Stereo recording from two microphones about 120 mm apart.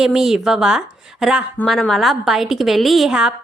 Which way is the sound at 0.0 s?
5° right (ahead or behind).